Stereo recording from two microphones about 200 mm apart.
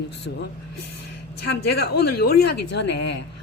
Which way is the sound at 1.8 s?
50° left (ahead or behind).